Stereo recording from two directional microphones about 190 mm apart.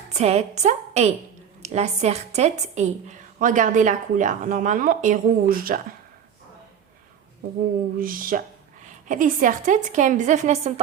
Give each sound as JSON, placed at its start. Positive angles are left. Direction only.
{"t": 0.1, "sound": "a woman's voice", "side_deg": -35}
{"t": 7.9, "sound": "a woman's voice", "side_deg": -45}